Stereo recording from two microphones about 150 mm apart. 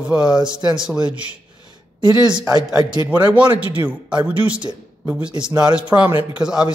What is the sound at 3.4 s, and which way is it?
Speech, 35° right (ahead or behind).